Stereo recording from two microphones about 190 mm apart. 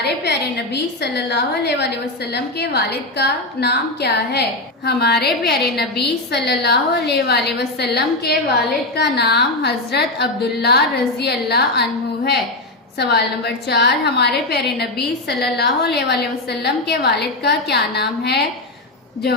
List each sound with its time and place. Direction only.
0.0 s a woman's voice: 60° left (ahead or behind)